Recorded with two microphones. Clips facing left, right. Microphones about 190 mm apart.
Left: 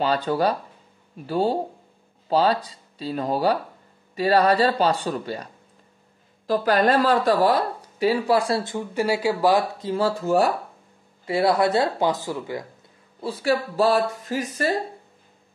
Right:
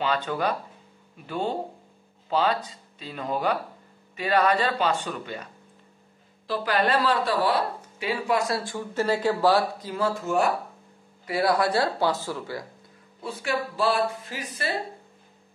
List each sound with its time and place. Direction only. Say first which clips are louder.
0.0 s speech: left 5 dB; 35° left (ahead or behind); by 9.8 s 15° left (ahead or behind)
9.8 s speech: left 5 dB; 30° left (ahead or behind)
13.2 s speech: left 6 dB; 35° left (ahead or behind)